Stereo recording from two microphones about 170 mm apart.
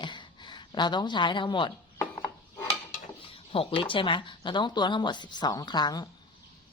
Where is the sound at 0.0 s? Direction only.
25° left (ahead or behind).